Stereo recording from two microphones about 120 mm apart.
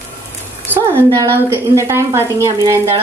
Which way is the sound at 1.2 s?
25° right (ahead or behind).